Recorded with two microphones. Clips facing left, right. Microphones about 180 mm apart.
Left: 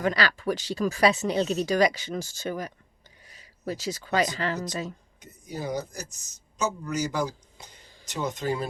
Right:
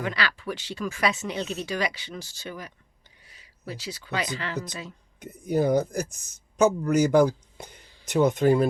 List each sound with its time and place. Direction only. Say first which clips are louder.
0.0 s speech: left 4 dB; 40° left (ahead or behind)
5.2 s speech: right 11 dB; 55° right (ahead or behind)